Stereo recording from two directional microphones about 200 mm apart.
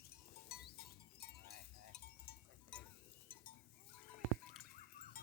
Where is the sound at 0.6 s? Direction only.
50° left (ahead or behind).